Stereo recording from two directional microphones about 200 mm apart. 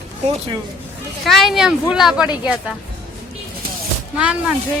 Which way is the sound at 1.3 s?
Centre (ahead or behind).